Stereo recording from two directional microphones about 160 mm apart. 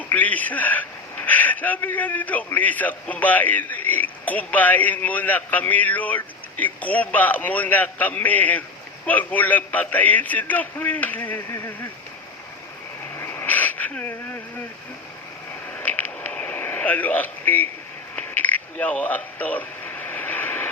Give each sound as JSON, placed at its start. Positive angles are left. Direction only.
{"t": 0.1, "sound": "a man's voice", "side_deg": 10}
{"t": 13.1, "sound": "wheeze", "side_deg": 15}
{"t": 15.7, "sound": "a sound", "side_deg": 10}